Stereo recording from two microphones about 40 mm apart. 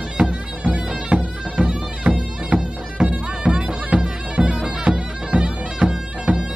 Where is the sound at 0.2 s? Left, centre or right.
Right.